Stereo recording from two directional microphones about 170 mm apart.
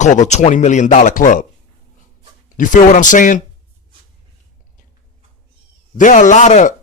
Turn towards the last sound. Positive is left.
turn(degrees=45)  # may be behind; listen again after turning